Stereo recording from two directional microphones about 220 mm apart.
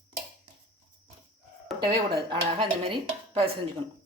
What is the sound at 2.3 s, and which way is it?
Speech, 20° right (ahead or behind).